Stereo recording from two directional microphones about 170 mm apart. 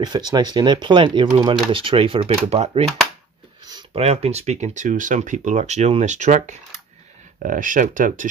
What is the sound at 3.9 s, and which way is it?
Speech, 35° right (ahead or behind).